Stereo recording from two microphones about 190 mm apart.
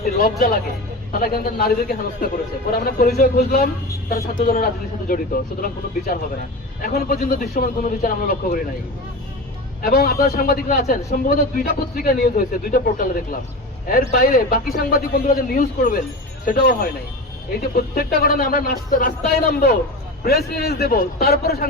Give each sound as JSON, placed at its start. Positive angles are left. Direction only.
{"t": 0.0, "sound": "a man's voice", "side_deg": 50}
{"t": 9.8, "sound": "a man's voice", "side_deg": 50}